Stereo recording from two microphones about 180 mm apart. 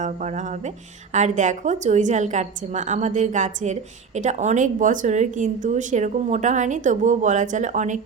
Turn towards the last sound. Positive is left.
turn(degrees=-45)  # may be behind; listen again after turning